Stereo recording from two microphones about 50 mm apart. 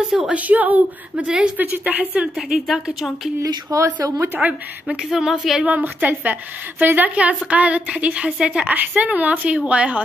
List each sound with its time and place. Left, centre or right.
0.3 s a woman's voice: right
1.1 s a woman's voice: right
2.3 s a woman's voice: centre
3.7 s speech: right
4.8 s speech: centre
5.7 s a woman's voice: right
7.2 s a woman's voice: right
8.6 s a woman's voice: right